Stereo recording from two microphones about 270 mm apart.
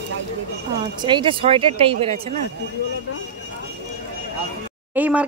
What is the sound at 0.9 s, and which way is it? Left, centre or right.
Speech, centre.